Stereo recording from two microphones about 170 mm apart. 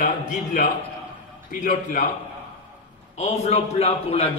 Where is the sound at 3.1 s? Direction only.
40° left (ahead or behind).